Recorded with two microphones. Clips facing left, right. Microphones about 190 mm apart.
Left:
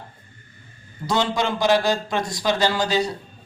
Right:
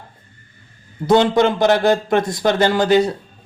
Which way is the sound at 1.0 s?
55° right (ahead or behind).